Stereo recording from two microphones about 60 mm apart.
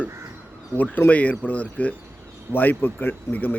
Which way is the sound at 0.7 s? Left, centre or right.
Right.